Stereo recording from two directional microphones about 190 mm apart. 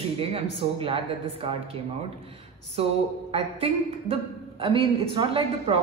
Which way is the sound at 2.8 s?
30° right (ahead or behind).